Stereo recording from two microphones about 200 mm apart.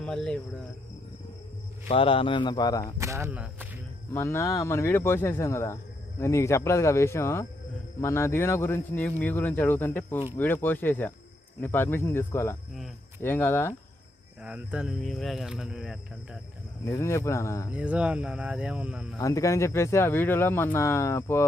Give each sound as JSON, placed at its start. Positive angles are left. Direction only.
{"t": 0.0, "sound": "speech", "side_deg": 5}
{"t": 1.9, "sound": "speech", "side_deg": 25}
{"t": 3.0, "sound": "speech", "side_deg": -15}
{"t": 4.1, "sound": "speech", "side_deg": 15}
{"t": 14.4, "sound": "speech", "side_deg": -5}
{"t": 16.8, "sound": "speech", "side_deg": 15}
{"t": 17.7, "sound": "speech", "side_deg": -5}
{"t": 19.2, "sound": "speech", "side_deg": 15}